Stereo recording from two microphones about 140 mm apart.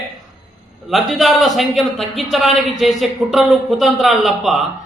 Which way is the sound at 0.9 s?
Centre (ahead or behind).